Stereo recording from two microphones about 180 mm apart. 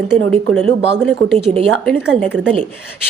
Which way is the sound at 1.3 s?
35° right (ahead or behind).